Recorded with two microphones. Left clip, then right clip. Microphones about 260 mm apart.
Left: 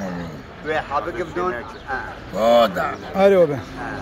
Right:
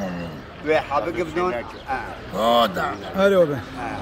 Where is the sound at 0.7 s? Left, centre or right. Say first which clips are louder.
Right 2 dB; right.